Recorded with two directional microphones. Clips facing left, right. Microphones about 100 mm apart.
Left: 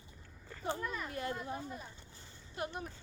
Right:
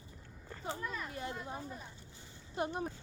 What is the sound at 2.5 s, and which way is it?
Speech, 30° right (ahead or behind).